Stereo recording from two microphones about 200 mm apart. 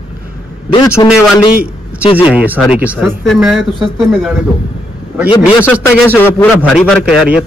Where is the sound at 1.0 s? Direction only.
20° left (ahead or behind).